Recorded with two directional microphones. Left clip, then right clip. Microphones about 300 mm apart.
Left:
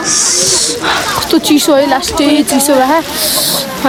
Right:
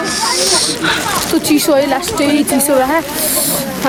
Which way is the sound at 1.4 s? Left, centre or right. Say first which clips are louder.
Left 3 dB; left.